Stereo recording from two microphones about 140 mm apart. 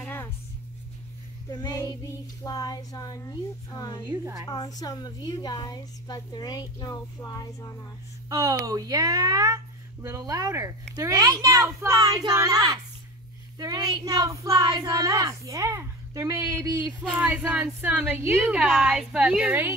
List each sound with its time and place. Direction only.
0.0 s music: 15° left (ahead or behind)
1.5 s a woman's voice: 25° left (ahead or behind)
4.1 s speech: 25° right (ahead or behind)
4.5 s a woman's voice: 25° left (ahead or behind)
8.3 s a woman's voice: 25° right (ahead or behind)